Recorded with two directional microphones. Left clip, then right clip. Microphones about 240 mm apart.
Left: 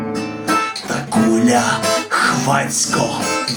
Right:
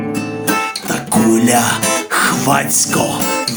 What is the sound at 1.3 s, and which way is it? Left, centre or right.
Music, right.